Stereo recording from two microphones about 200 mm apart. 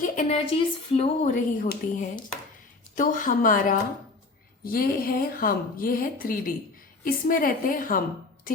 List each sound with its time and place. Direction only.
0.0 s a woman's voice: 35° left (ahead or behind)